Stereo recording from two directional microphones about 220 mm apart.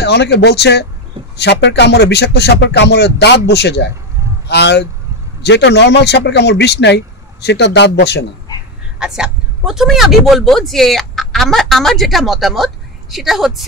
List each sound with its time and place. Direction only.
0.0 s a man's voice: 50° left (ahead or behind)
9.0 s a man's voice: 5° right (ahead or behind)